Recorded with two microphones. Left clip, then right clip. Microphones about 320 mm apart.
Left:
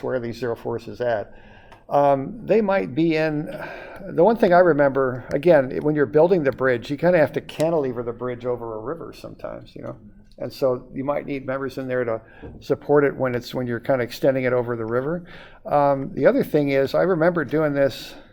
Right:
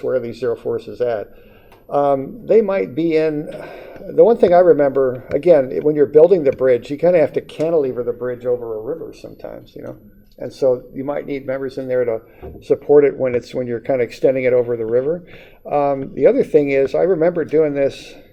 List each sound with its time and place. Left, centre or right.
0.2 s speech: left
2.0 s speech: left
7.9 s speech: left
11.2 s speech: left
12.7 s speech: left
14.6 s speech: left